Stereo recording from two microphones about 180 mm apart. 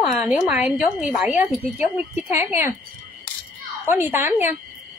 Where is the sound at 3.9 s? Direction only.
10° right (ahead or behind).